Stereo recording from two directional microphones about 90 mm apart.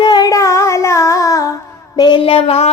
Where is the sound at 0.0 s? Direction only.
55° left (ahead or behind).